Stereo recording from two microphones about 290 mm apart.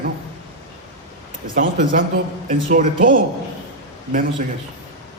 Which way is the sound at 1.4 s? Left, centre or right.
Right.